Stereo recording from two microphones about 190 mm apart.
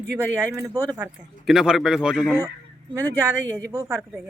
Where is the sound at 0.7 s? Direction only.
20° right (ahead or behind).